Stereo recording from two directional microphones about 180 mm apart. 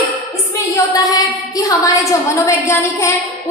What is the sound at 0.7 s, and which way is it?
A woman's voice, 20° left (ahead or behind).